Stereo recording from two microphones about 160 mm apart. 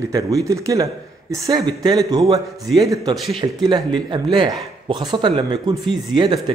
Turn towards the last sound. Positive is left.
turn(degrees=-30)  # may be behind; listen again after turning